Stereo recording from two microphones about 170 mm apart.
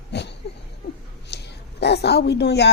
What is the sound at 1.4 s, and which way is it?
A woman's voice, 75° left (ahead or behind).